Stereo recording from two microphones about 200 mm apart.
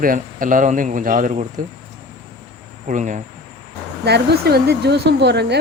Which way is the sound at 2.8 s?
40° right (ahead or behind).